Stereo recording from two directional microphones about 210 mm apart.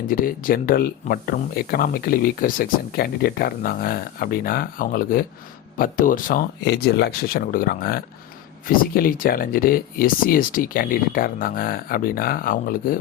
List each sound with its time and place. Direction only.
0.1 s speech: 40° left (ahead or behind)